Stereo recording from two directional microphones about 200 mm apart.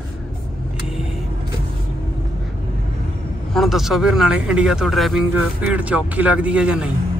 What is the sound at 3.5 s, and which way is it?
Speech, centre (ahead or behind).